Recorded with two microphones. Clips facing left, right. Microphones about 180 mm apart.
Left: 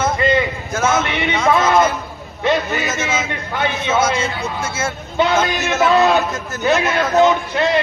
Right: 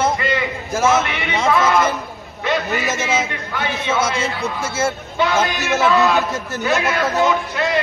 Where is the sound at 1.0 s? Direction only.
25° left (ahead or behind).